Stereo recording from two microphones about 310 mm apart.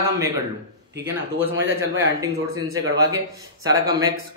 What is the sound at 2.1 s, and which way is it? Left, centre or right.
Speech, centre.